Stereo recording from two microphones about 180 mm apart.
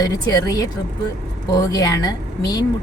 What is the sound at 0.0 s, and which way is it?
A woman's voice, 20° left (ahead or behind).